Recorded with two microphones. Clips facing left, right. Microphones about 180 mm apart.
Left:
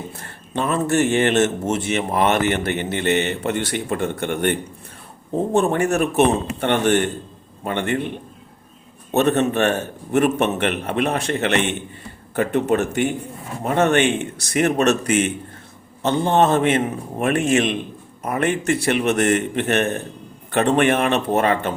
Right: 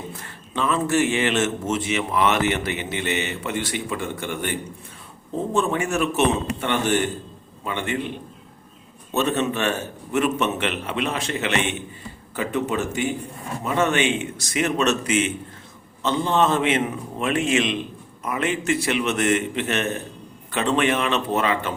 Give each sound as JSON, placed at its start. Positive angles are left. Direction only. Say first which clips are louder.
{"t": 0.5, "sound": "speech", "louder": "left 2 dB", "side_deg": 50}
{"t": 5.5, "sound": "a man's voice", "louder": "left 4 dB", "side_deg": 60}